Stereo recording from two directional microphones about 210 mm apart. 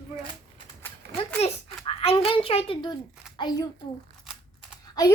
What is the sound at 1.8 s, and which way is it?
A child's voice, 25° left (ahead or behind).